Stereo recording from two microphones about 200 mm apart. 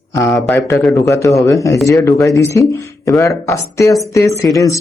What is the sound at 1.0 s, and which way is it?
Speech, 15° left (ahead or behind).